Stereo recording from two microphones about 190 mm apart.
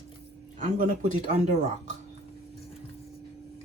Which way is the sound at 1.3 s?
35° right (ahead or behind).